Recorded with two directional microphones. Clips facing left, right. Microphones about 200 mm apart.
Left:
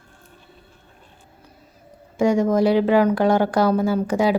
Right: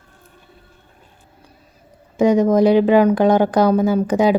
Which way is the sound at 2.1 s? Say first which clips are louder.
Right 4 dB; 20° right (ahead or behind).